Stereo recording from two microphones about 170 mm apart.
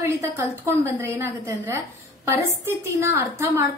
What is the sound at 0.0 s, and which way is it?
A woman's voice, 15° right (ahead or behind).